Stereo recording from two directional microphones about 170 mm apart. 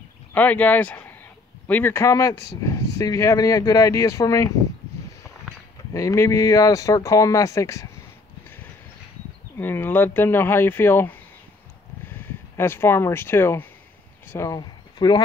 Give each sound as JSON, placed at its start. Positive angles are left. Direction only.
{"t": 0.3, "sound": "speech", "side_deg": 10}
{"t": 5.9, "sound": "speech", "side_deg": 15}
{"t": 9.6, "sound": "speech", "side_deg": 15}